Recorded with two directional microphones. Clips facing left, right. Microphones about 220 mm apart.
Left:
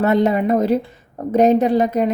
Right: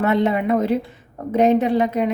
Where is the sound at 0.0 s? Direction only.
40° left (ahead or behind).